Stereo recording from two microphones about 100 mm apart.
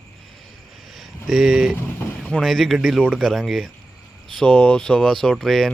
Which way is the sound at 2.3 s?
Centre (ahead or behind).